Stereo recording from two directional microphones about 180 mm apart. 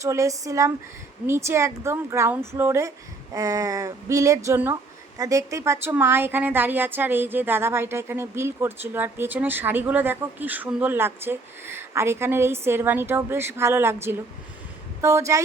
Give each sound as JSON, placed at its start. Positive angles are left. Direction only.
{"t": 0.0, "sound": "a woman's voice", "side_deg": -15}